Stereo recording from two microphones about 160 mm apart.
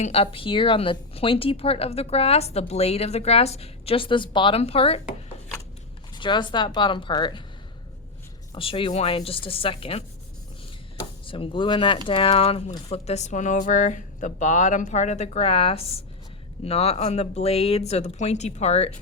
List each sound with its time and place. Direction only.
0.0 s speech: 40° left (ahead or behind)
6.1 s speech: 30° left (ahead or behind)
8.5 s speech: 35° left (ahead or behind)
11.3 s speech: 35° left (ahead or behind)